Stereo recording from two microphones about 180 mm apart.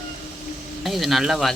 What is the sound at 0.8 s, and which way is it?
Speech, centre (ahead or behind).